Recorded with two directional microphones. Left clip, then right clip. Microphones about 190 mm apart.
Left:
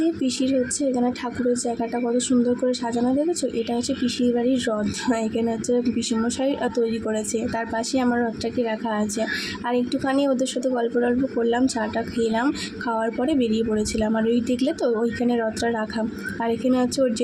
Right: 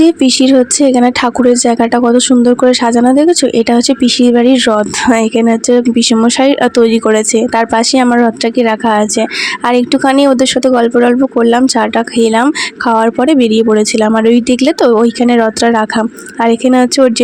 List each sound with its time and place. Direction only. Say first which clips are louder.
0.0 s speech: right 15 dB; 50° right (ahead or behind)